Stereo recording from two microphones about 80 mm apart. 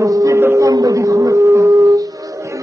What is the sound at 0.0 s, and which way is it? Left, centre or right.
Music, right.